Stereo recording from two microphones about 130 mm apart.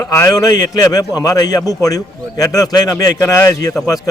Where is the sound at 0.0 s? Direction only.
20° left (ahead or behind).